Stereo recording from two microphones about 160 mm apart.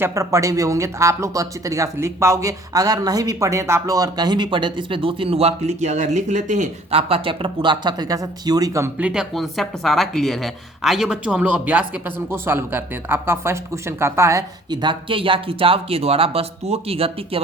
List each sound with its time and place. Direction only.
0.0 s speech: 20° right (ahead or behind); by 17.4 s 35° right (ahead or behind)